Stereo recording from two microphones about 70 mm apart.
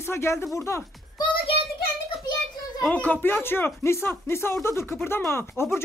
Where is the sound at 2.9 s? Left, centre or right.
Left.